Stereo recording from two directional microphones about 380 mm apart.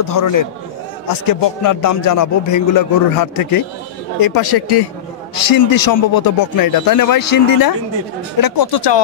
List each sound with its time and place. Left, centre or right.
0.0 s a man's voice: left
5.3 s a man's voice: left